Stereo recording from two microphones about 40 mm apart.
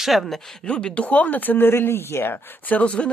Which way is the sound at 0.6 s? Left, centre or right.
Left.